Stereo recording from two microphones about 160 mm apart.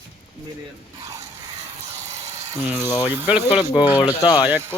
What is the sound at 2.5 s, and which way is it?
Speech, 15° right (ahead or behind).